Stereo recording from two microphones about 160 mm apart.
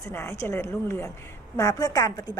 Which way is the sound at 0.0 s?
15° left (ahead or behind).